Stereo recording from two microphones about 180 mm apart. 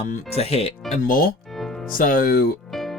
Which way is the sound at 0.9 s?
50° left (ahead or behind).